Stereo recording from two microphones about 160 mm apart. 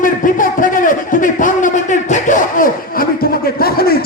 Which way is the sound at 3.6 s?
70° left (ahead or behind).